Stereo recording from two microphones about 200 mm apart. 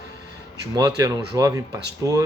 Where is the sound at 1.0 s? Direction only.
15° right (ahead or behind).